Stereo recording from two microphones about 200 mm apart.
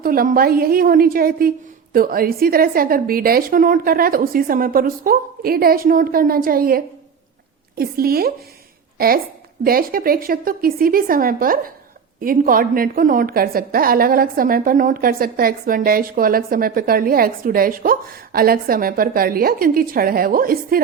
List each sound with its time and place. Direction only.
0.0 s a woman's voice: 45° right (ahead or behind)